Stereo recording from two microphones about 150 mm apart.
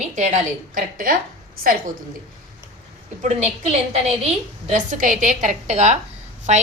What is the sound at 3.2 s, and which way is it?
Speech, 50° right (ahead or behind).